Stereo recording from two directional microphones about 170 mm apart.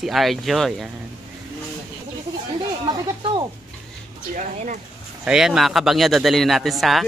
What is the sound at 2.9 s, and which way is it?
Speech, 25° right (ahead or behind).